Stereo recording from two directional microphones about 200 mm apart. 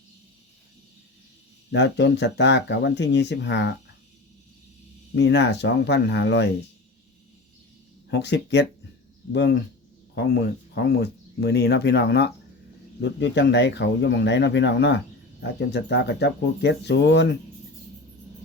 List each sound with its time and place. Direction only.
1.7 s speech: 60° left (ahead or behind)
5.1 s speech: 60° left (ahead or behind)
8.1 s speech: 60° left (ahead or behind)